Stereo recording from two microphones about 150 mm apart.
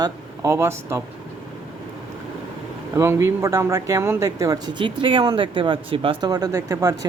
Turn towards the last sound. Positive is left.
turn(degrees=-20)  # may be behind; listen again after turning